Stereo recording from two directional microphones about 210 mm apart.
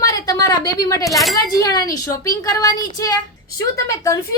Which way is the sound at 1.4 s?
15° left (ahead or behind).